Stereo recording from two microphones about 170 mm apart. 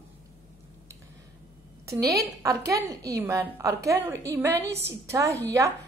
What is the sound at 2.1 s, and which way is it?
A woman's voice, 20° right (ahead or behind).